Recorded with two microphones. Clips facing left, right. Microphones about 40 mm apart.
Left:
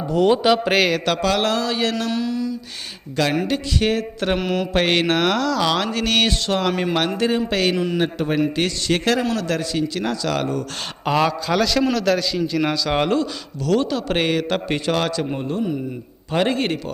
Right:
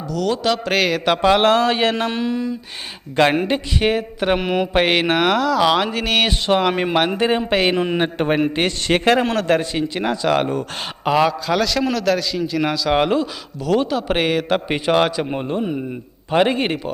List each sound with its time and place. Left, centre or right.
0.1 s speech: left
0.4 s a man's voice: centre
0.8 s a man's voice: centre
1.0 s speech: right
3.2 s a sound: right
11.0 s a man's voice: centre; by 15.8 s right
16.3 s a sound: centre